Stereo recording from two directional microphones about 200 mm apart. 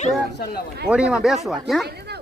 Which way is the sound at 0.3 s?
50° left (ahead or behind).